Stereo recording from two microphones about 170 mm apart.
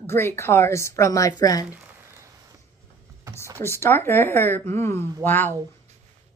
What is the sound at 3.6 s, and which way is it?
A woman's voice, 15° left (ahead or behind).